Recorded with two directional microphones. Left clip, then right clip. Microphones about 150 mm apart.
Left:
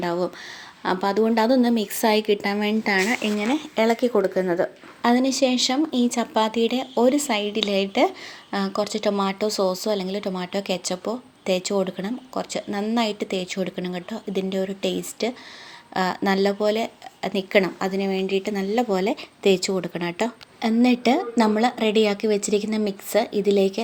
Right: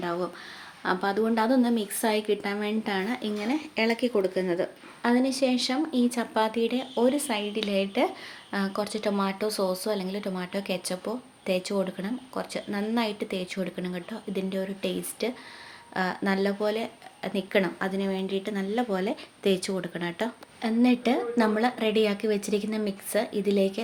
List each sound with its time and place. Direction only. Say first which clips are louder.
0.0 s speech: left 6 dB; 40° left (ahead or behind)
3.2 s speech: left 6 dB; 25° left (ahead or behind)
5.0 s speech: left 5 dB; 45° left (ahead or behind)